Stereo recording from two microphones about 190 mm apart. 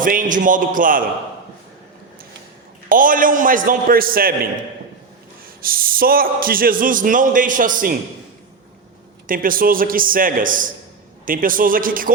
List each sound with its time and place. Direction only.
0.0 s speech: 45° right (ahead or behind)
2.9 s speech: 45° right (ahead or behind)
5.6 s speech: 50° right (ahead or behind)
9.2 s speech: 45° right (ahead or behind)